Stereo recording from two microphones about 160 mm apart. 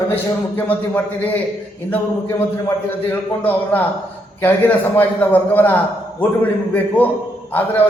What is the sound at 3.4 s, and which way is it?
A man's voice, 10° left (ahead or behind).